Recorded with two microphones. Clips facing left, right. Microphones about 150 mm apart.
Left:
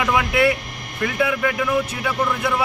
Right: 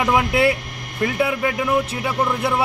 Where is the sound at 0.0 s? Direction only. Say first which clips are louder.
Right 1 dB; 30° right (ahead or behind).